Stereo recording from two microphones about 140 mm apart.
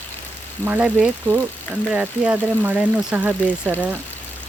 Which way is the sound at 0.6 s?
10° right (ahead or behind).